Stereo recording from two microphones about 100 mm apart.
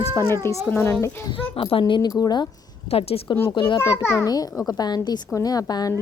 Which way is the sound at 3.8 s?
25° left (ahead or behind).